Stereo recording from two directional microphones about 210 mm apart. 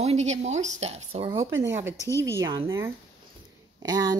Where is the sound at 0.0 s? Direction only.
30° right (ahead or behind).